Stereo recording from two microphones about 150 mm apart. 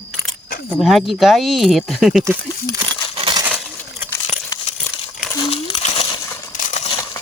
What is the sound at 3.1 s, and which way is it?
Coin, 35° right (ahead or behind).